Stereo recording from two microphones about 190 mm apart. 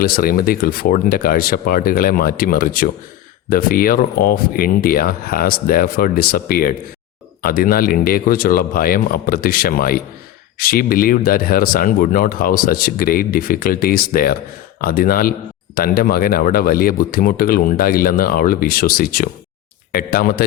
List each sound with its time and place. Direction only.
0.0 s speech: 50° left (ahead or behind)